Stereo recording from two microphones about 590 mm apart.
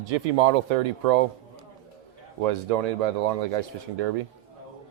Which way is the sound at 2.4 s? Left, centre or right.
Right.